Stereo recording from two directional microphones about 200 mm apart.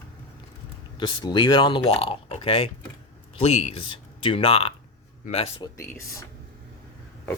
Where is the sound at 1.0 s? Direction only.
20° left (ahead or behind).